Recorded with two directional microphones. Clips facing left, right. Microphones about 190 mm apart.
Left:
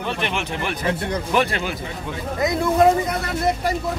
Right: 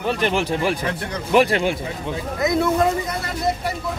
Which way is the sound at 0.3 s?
35° right (ahead or behind).